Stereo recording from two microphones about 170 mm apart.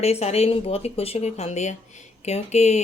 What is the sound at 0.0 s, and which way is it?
Speech, 40° left (ahead or behind).